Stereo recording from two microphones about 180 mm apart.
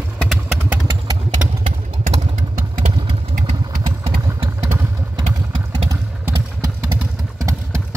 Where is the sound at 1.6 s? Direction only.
35° right (ahead or behind).